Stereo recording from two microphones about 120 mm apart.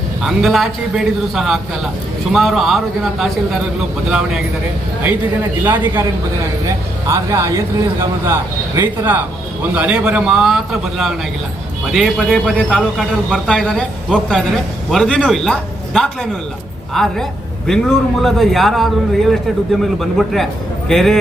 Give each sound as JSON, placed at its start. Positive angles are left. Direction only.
{"t": 0.2, "sound": "a man's voice", "side_deg": 0}
{"t": 5.6, "sound": "a man's voice", "side_deg": -15}